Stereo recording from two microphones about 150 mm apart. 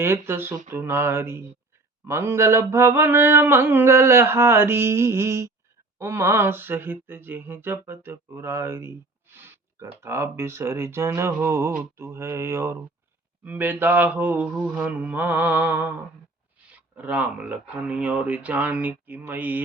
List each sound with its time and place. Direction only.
0.0 s speech: 15° right (ahead or behind)